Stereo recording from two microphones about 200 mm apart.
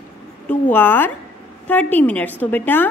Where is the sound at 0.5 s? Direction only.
10° left (ahead or behind).